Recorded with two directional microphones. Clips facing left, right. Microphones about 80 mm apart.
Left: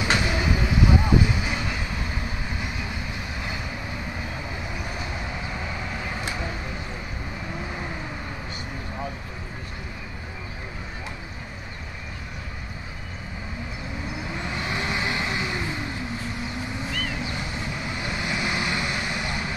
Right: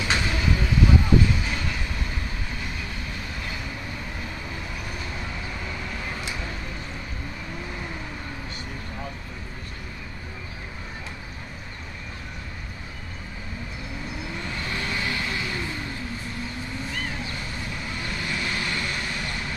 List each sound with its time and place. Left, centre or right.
0.0 s vehicle: centre
4.9 s vehicle: centre
14.3 s vehicle: centre
17.2 s vehicle: centre